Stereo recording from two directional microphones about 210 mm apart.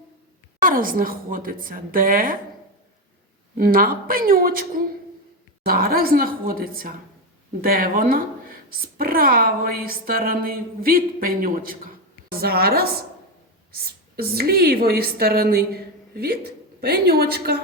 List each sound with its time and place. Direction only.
0.6 s a woman's voice: 40° right (ahead or behind)
3.6 s a woman's voice: 45° right (ahead or behind)
14.2 s a woman's voice: 45° right (ahead or behind)